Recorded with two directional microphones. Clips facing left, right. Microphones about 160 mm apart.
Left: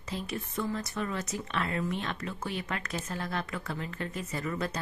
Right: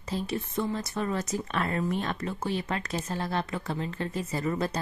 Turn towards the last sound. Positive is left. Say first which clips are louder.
# right 4 dB
turn(degrees=-35)  # may be behind; listen again after turning